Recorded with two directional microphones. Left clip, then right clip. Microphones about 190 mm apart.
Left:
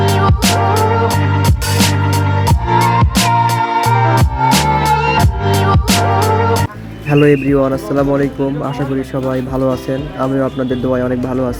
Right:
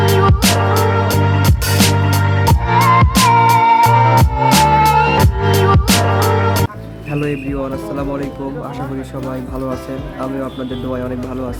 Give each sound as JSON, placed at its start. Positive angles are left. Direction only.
{"t": 0.0, "sound": "music", "side_deg": 0}
{"t": 7.1, "sound": "speech", "side_deg": 30}